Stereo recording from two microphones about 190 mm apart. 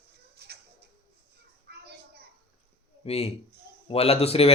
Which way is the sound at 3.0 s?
35° left (ahead or behind).